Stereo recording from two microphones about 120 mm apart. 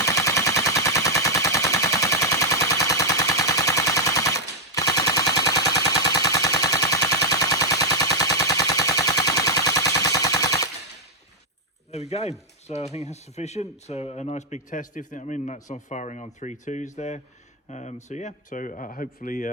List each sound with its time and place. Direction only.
0.0 s machine gun: 25° left (ahead or behind)
11.9 s a sound: 65° left (ahead or behind)
12.6 s speech: 65° left (ahead or behind); by 18.9 s 90° left